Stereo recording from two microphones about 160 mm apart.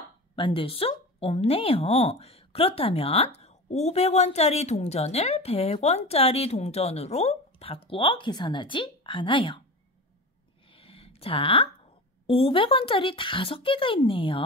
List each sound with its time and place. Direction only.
0.4 s speech: 35° left (ahead or behind)
10.7 s a sound: 35° left (ahead or behind)
12.3 s speech: 35° left (ahead or behind)